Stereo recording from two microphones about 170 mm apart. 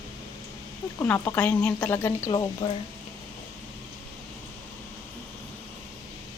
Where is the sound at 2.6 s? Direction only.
30° left (ahead or behind).